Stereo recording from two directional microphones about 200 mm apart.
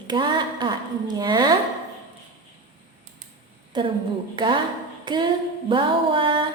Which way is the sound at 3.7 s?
20° right (ahead or behind).